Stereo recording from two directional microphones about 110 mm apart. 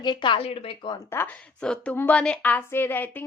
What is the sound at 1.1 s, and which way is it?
Speech, 20° left (ahead or behind).